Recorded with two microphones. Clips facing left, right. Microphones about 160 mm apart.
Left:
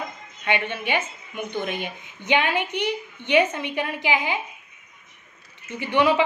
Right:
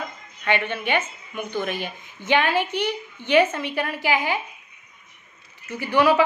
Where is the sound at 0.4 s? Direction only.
20° left (ahead or behind).